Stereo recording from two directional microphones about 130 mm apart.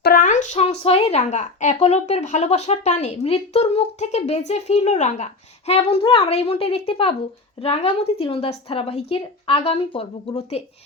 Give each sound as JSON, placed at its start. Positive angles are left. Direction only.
{"t": 0.1, "sound": "a woman's voice", "side_deg": 85}